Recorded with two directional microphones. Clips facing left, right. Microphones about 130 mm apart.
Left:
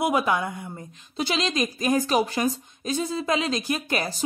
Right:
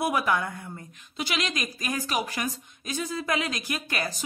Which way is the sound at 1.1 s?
30° left (ahead or behind).